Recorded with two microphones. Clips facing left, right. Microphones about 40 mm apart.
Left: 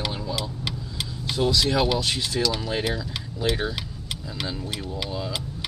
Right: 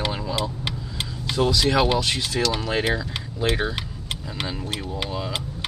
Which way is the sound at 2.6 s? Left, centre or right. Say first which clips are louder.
Right 3 dB; right.